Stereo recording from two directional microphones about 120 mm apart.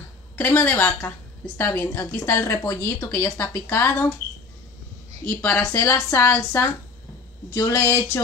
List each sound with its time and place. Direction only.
0.4 s a woman's voice: 15° left (ahead or behind)
5.2 s a woman's voice: 15° left (ahead or behind)